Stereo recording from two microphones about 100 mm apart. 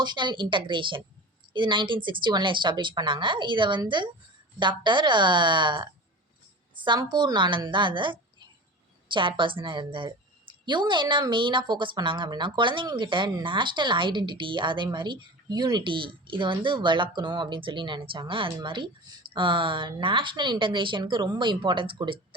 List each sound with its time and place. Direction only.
0.0 s a woman's voice: 50° right (ahead or behind)